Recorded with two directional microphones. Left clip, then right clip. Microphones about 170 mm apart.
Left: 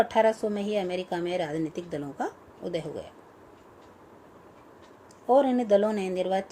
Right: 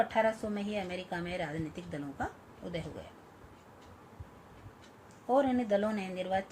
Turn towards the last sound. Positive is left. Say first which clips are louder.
# left 7 dB
turn(degrees=55)  # may be behind; listen again after turning